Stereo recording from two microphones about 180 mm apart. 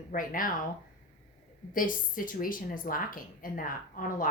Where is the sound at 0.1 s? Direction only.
50° left (ahead or behind).